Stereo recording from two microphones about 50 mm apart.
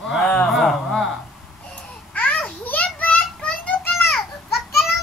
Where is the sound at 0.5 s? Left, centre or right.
Centre.